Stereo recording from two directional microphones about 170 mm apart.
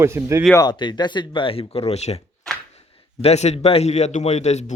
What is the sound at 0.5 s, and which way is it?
Speech, 25° left (ahead or behind).